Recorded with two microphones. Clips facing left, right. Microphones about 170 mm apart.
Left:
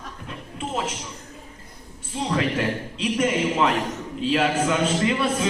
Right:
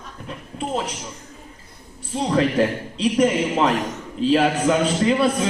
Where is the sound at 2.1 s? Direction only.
35° right (ahead or behind).